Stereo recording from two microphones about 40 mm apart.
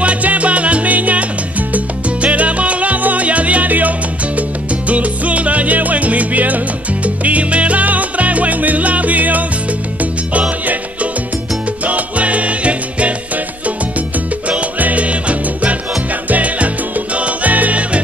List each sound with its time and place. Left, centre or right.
0.0 s salsa music: right
11.8 s salsa music: right
14.8 s music: right
16.3 s salsa music: right